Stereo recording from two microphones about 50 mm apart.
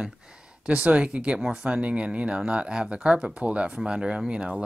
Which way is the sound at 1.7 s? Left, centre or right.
Right.